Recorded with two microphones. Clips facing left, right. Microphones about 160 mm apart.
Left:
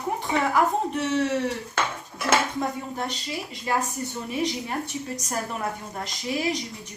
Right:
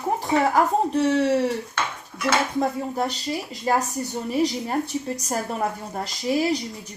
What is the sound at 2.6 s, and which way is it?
Speech, 35° right (ahead or behind).